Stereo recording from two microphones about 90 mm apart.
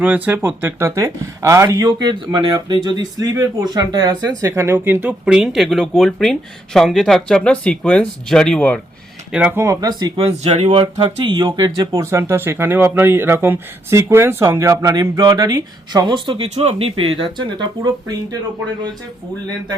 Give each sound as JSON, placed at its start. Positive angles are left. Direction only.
{"t": 0.0, "sound": "speech", "side_deg": -20}
{"t": 1.8, "sound": "speech", "side_deg": -55}
{"t": 5.0, "sound": "speech", "side_deg": -10}
{"t": 9.5, "sound": "speech", "side_deg": -30}
{"t": 9.8, "sound": "speech", "side_deg": -55}
{"t": 10.2, "sound": "speech", "side_deg": -80}